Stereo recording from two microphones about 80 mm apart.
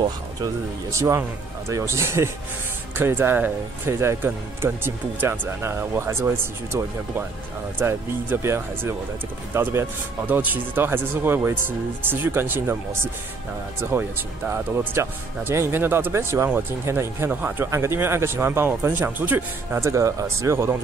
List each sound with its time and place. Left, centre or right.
0.9 s speech: right
15.0 s speech: right
17.3 s speech: right
17.6 s speech: right